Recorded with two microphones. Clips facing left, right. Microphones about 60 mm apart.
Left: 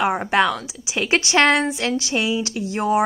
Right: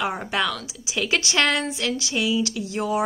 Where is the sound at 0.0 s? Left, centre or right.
Left.